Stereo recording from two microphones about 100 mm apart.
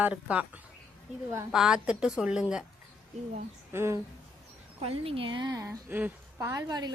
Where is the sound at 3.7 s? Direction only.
25° right (ahead or behind).